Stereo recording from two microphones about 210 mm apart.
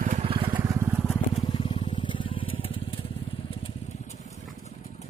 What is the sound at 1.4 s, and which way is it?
Crushing, 25° left (ahead or behind).